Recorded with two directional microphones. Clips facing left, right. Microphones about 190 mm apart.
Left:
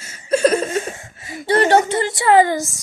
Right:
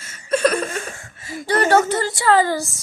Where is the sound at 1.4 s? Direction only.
25° left (ahead or behind).